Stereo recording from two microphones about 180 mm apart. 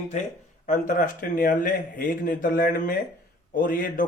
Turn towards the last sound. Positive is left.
turn(degrees=50)  # may be behind; listen again after turning